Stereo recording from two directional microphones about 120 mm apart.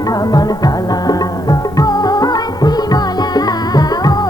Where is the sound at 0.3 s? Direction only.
30° left (ahead or behind).